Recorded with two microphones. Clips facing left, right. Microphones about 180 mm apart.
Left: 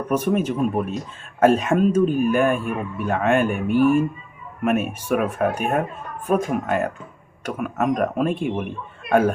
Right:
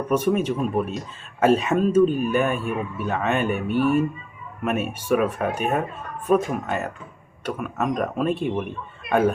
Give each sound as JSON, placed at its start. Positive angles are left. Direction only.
{"t": 0.1, "sound": "speech", "side_deg": 5}